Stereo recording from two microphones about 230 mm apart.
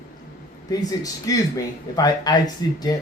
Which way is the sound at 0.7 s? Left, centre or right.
Centre.